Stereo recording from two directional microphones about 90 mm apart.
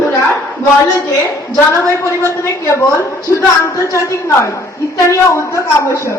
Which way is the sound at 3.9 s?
35° left (ahead or behind).